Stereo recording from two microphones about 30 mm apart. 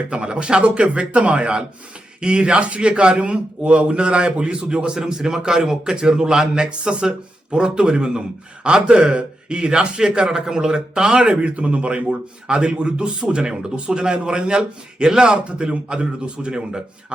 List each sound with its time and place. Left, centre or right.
0.1 s speech: right
9.0 s speech: right
9.6 s speech: right
11.2 s speech: right